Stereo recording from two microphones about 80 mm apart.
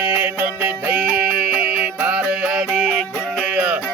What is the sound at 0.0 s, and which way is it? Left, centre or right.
Music, centre.